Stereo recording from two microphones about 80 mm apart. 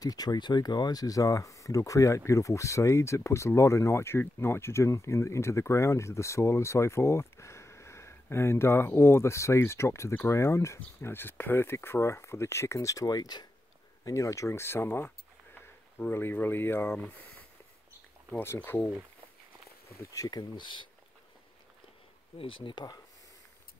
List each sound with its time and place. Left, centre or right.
0.0 s speech: left
14.0 s speech: left
18.4 s speech: left
20.1 s speech: left
20.5 s speech: left
22.5 s speech: left